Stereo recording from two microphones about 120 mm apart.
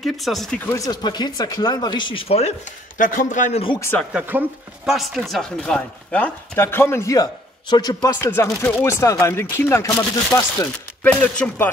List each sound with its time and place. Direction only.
0.0 s speech: centre (ahead or behind)
0.7 s speech: 30° left (ahead or behind); by 2.5 s 55° left (ahead or behind)
3.1 s a man's voice: 90° left
4.1 s speech: 10° right (ahead or behind)
4.9 s speech: centre (ahead or behind); by 11.1 s 25° left (ahead or behind)
11.1 s speech: 10° left (ahead or behind)